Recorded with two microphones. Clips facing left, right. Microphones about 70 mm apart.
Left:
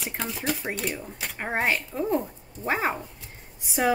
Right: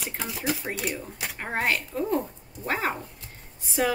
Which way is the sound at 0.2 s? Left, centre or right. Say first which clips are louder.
Even; centre.